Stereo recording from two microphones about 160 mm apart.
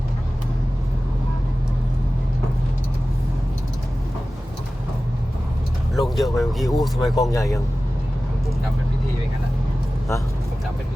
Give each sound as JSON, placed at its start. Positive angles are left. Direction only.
{"t": 6.0, "sound": "speech", "side_deg": 0}
{"t": 7.2, "sound": "speech", "side_deg": 20}